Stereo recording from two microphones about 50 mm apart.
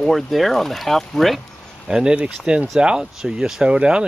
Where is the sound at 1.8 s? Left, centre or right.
Centre.